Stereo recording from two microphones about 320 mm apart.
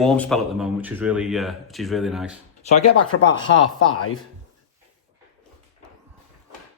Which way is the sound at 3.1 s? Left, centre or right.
Left.